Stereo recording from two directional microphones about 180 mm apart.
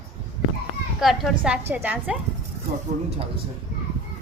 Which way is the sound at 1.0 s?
Centre (ahead or behind).